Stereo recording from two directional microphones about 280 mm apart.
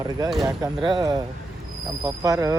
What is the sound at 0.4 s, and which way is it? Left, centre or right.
Speech, centre.